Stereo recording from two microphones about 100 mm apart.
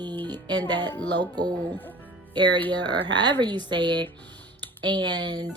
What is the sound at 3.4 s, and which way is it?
Speech, 45° right (ahead or behind).